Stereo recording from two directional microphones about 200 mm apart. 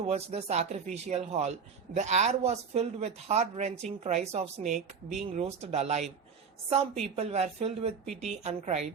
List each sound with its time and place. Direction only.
0.1 s speech: 30° right (ahead or behind)